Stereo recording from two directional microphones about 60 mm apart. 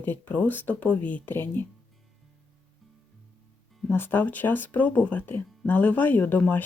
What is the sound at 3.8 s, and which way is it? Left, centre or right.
Speech, left.